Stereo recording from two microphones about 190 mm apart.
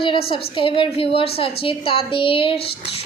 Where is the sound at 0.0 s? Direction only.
30° left (ahead or behind).